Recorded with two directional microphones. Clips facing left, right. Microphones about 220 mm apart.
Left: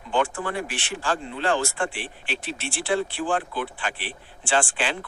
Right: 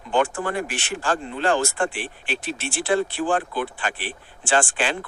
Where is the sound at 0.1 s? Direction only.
45° right (ahead or behind).